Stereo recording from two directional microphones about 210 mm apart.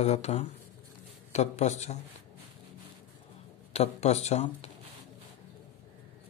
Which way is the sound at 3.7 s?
30° left (ahead or behind).